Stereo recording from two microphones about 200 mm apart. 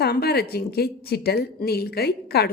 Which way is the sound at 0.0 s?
50° left (ahead or behind).